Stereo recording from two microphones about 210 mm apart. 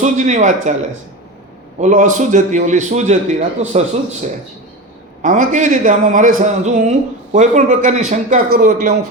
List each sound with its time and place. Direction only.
0.0 s a man's voice: 35° right (ahead or behind)
1.8 s a man's voice: 35° right (ahead or behind)